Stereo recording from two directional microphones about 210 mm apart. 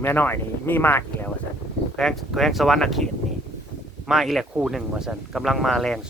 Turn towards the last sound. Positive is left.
turn(degrees=0)  # may be behind; listen again after turning